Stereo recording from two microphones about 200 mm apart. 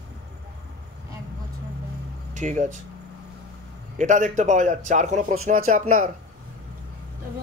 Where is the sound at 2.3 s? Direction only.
40° right (ahead or behind).